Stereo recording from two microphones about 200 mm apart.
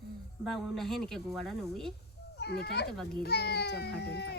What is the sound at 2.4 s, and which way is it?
Speech, 55° left (ahead or behind).